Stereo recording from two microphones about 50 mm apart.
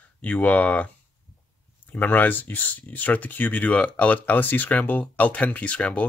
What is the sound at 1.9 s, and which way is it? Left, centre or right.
Speech, left.